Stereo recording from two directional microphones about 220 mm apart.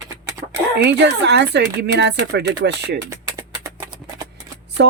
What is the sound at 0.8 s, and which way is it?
Speech, 50° right (ahead or behind).